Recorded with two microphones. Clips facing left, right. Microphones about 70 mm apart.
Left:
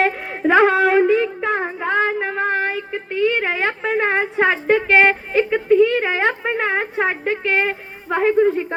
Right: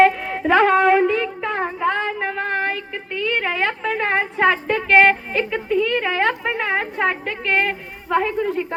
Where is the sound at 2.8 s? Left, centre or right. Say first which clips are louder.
Left 6 dB; left.